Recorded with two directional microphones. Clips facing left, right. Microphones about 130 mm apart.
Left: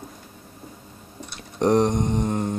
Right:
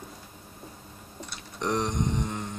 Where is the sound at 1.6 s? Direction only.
50° left (ahead or behind).